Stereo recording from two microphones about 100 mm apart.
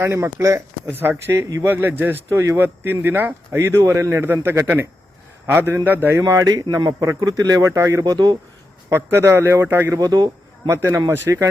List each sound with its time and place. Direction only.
0.0 s a man's voice: 25° right (ahead or behind)
8.9 s speech: 25° right (ahead or behind)
10.0 s a man's voice: 45° right (ahead or behind)
10.7 s speech: 30° right (ahead or behind)